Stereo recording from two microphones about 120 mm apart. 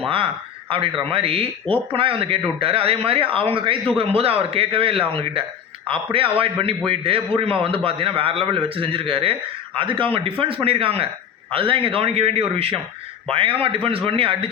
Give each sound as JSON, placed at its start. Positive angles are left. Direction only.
{"t": 0.7, "sound": "a man's voice", "side_deg": -50}